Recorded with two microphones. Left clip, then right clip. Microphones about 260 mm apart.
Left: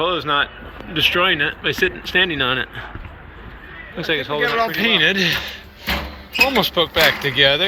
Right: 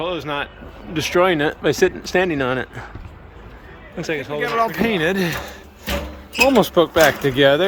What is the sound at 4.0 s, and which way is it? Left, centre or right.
Speech, centre.